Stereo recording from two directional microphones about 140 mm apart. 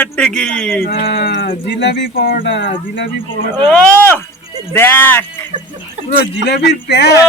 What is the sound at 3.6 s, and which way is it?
Speech, 10° left (ahead or behind).